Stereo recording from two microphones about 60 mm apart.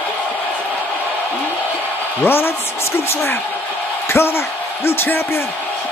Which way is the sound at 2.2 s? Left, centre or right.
Left.